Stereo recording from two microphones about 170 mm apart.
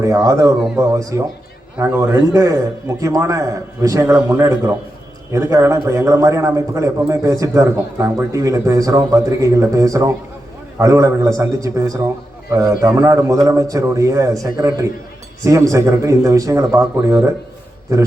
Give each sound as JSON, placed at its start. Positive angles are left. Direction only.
{"t": 0.0, "sound": "a man's voice", "side_deg": -20}